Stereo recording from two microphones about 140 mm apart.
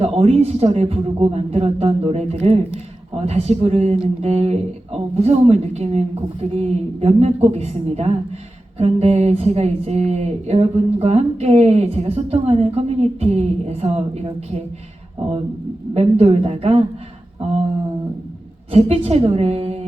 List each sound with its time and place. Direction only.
0.0 s speech: 50° right (ahead or behind)
16.0 s speech: 45° right (ahead or behind)
18.7 s speech: 45° right (ahead or behind)